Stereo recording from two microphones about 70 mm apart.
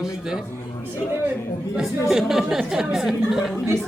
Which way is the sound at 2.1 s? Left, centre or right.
Centre.